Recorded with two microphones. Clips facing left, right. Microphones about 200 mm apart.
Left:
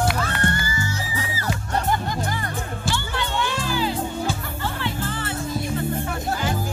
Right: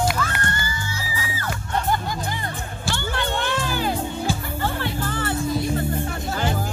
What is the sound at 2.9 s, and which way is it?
Music, 55° right (ahead or behind).